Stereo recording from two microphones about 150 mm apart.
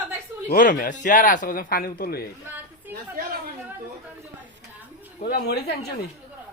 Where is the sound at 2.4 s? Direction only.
15° right (ahead or behind).